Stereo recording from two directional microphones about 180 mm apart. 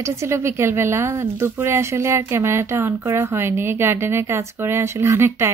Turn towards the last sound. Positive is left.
turn(degrees=-15)  # may be behind; listen again after turning